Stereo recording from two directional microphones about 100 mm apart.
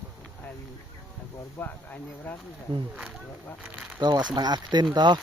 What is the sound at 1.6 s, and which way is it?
Speech, 20° left (ahead or behind).